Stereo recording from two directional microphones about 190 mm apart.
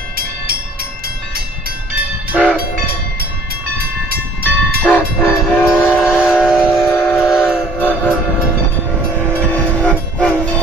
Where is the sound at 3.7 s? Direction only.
55° right (ahead or behind).